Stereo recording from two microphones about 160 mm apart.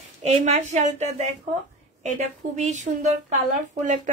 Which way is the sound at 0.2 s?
45° right (ahead or behind).